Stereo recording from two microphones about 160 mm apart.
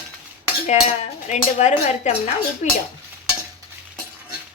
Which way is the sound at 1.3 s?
45° left (ahead or behind).